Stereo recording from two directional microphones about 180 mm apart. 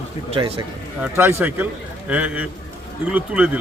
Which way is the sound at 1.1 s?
10° right (ahead or behind).